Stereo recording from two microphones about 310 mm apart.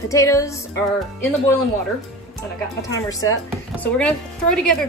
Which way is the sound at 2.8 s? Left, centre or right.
Centre.